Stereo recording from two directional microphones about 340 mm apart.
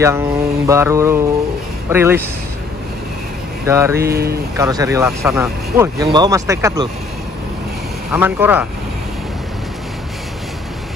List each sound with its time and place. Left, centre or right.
0.0 s speech: centre
3.6 s speech: centre
4.0 s speech: right
4.6 s speech: centre
8.1 s speech: centre